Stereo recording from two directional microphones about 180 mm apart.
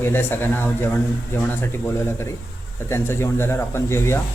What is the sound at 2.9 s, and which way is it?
Speech, 15° left (ahead or behind).